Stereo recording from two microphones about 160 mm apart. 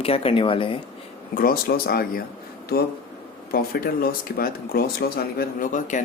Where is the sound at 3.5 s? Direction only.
65° left (ahead or behind).